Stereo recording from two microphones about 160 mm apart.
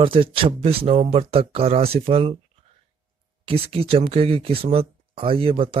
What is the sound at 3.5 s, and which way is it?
Speech, 35° right (ahead or behind).